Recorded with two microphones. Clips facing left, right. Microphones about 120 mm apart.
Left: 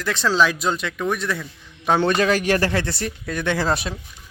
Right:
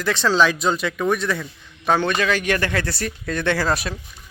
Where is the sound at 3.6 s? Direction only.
25° left (ahead or behind).